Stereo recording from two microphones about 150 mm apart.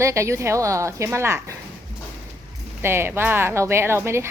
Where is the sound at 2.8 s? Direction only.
15° right (ahead or behind).